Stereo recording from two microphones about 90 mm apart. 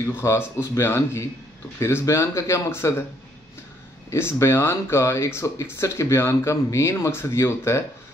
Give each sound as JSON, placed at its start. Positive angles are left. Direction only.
{"t": 0.0, "sound": "speech", "side_deg": 30}
{"t": 4.1, "sound": "speech", "side_deg": 30}